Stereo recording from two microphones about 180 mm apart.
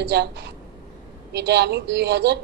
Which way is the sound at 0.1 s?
70° right (ahead or behind).